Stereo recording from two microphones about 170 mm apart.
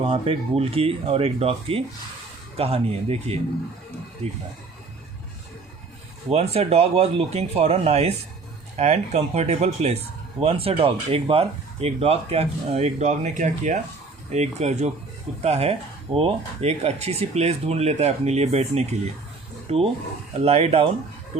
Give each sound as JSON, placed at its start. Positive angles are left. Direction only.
{"t": 0.0, "sound": "speech", "side_deg": -30}
{"t": 6.3, "sound": "speech", "side_deg": -35}